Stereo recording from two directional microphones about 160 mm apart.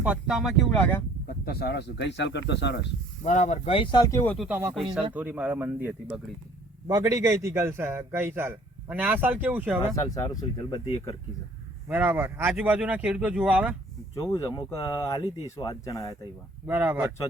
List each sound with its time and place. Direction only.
0.0 s speech: 5° right (ahead or behind)
0.8 s speech: 10° left (ahead or behind)
1.3 s speech: 75° left (ahead or behind)
3.2 s speech: 50° left (ahead or behind)
4.0 s speech: 20° left (ahead or behind)
4.4 s a man's voice: 10° right (ahead or behind)
6.8 s a man's voice: 20° right (ahead or behind)
9.9 s speech: 20° left (ahead or behind)
11.9 s a man's voice: 10° right (ahead or behind)
14.2 s speech: 15° left (ahead or behind)
16.6 s a man's voice: 10° right (ahead or behind)